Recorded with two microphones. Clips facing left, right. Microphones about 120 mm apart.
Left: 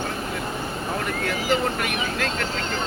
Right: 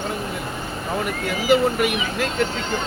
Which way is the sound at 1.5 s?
10° right (ahead or behind).